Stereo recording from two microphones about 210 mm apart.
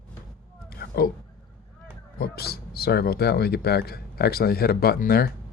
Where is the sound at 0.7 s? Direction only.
45° left (ahead or behind).